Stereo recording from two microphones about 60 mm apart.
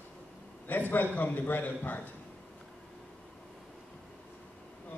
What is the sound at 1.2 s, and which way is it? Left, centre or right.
Speech, left.